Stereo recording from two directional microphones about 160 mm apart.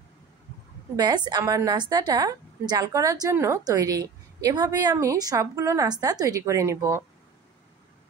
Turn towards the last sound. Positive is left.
turn(degrees=-20)  # may be behind; listen again after turning